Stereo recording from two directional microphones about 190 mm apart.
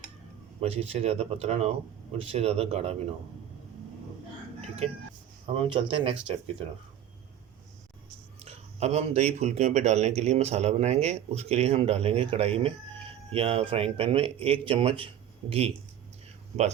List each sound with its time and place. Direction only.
0.6 s speech: 30° right (ahead or behind)
5.5 s a man's voice: 30° right (ahead or behind)
8.4 s a man's voice: 35° right (ahead or behind)